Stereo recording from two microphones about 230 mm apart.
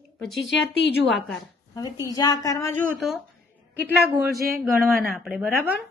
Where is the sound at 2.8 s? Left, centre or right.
Centre.